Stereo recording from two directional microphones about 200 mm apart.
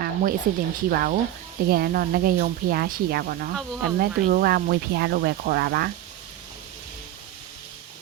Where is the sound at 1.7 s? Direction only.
50° right (ahead or behind).